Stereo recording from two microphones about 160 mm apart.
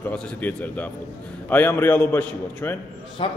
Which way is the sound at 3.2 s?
30° left (ahead or behind).